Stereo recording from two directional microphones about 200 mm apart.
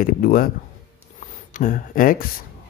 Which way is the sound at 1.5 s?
40° left (ahead or behind).